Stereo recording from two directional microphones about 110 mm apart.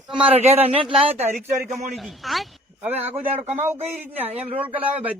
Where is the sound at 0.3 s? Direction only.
70° right (ahead or behind).